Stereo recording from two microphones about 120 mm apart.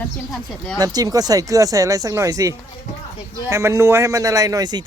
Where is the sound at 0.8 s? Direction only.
30° right (ahead or behind).